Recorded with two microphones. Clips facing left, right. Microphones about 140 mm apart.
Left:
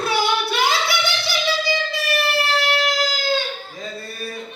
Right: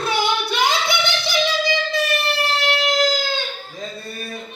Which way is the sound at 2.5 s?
20° right (ahead or behind).